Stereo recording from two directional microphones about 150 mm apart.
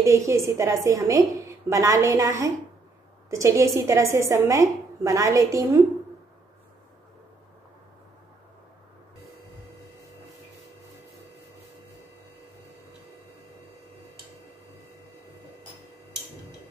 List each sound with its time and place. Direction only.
0.0 s a woman's voice: 20° right (ahead or behind)